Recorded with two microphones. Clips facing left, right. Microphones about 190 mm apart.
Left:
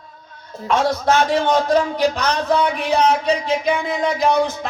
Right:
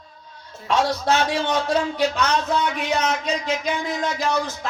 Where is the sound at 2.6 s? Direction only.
30° left (ahead or behind).